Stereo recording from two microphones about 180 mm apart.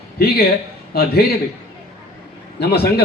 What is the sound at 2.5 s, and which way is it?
Speech, 65° left (ahead or behind).